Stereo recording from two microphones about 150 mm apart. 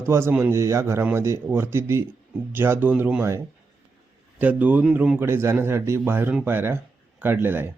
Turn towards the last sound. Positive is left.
turn(degrees=-15)  # may be behind; listen again after turning